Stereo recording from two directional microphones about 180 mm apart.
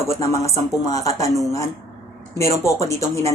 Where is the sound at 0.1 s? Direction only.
15° left (ahead or behind).